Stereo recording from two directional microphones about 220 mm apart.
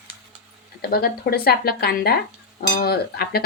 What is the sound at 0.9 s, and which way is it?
Speech, 45° left (ahead or behind).